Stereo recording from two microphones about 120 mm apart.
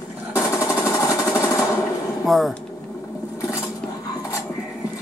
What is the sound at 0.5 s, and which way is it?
Jackhammer, 25° left (ahead or behind).